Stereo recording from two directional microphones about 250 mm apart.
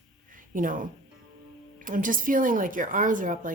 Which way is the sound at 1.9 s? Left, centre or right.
Right.